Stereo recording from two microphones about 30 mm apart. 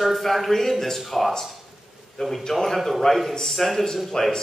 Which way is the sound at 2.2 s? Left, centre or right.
Centre.